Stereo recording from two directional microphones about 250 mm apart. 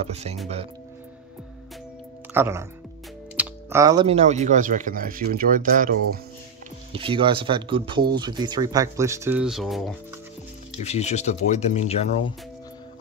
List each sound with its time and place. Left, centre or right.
0.0 s speech: right
2.3 s speech: centre; by 5.9 s right
6.9 s speech: right; by 9.9 s centre
10.8 s speech: left